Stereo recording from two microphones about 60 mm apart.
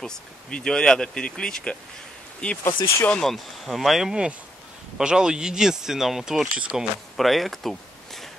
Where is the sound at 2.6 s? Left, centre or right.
Left.